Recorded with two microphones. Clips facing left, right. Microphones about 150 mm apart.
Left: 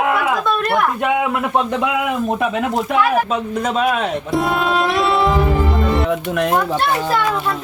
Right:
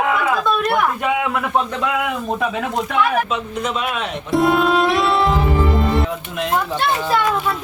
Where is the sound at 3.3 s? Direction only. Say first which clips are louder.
Left 3 dB; 40° left (ahead or behind).